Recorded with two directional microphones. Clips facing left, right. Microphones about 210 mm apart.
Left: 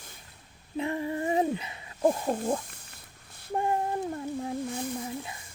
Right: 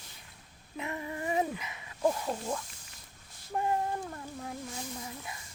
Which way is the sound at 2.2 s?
55° left (ahead or behind).